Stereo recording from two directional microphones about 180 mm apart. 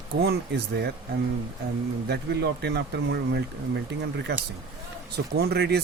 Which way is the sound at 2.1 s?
65° right (ahead or behind).